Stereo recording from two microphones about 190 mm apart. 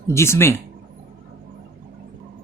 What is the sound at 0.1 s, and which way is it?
Speech, 15° left (ahead or behind).